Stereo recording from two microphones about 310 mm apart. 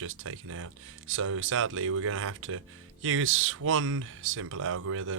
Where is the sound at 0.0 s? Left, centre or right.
Right.